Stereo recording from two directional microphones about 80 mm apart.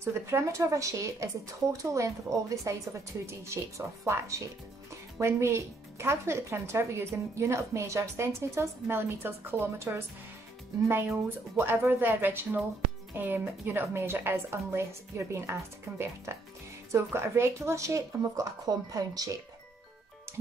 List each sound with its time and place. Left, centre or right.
0.0 s speech: right
11.2 s a woman's voice: right